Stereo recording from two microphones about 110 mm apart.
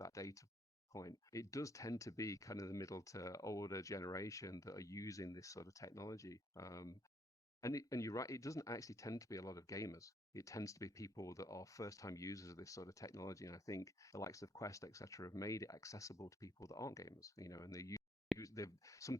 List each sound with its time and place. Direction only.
0.0 s speech: 30° left (ahead or behind)